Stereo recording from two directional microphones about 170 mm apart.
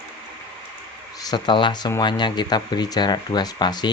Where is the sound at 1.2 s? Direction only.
25° left (ahead or behind).